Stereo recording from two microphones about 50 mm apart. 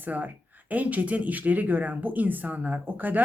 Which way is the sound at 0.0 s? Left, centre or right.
Right.